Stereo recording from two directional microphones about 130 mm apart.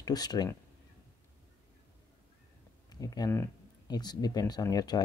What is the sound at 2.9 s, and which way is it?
Speech, 30° left (ahead or behind).